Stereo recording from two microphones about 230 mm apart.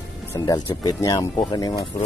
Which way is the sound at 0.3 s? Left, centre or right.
Centre.